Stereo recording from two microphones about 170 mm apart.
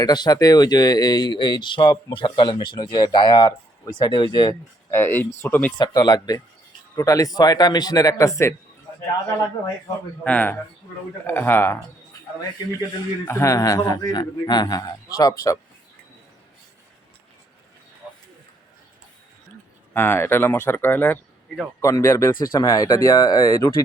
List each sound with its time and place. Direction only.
0.0 s speech: 25° left (ahead or behind)
4.9 s speech: 10° left (ahead or behind)
5.7 s speech: 25° left (ahead or behind)
10.2 s speech: 10° left (ahead or behind)
13.2 s speech: 20° left (ahead or behind)
19.9 s speech: 10° left (ahead or behind)